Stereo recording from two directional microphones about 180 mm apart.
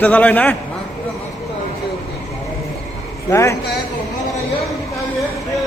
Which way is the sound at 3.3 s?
15° left (ahead or behind).